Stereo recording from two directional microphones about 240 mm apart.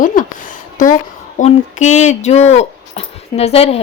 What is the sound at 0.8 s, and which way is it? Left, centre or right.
A woman's voice, left.